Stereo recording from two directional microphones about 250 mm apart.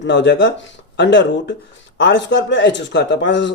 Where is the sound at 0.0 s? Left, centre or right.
Left.